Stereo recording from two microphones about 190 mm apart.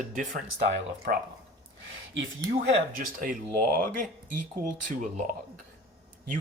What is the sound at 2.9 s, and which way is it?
Speech, 45° right (ahead or behind).